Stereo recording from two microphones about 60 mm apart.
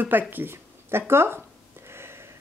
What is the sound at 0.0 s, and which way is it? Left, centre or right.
Speech, right.